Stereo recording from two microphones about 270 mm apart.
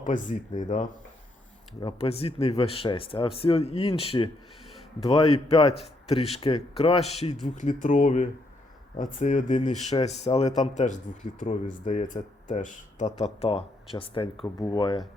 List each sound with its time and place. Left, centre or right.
0.0 s speech: left